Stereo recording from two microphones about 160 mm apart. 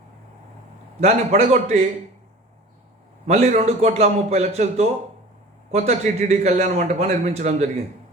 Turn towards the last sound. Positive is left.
turn(degrees=-45)  # may be behind; listen again after turning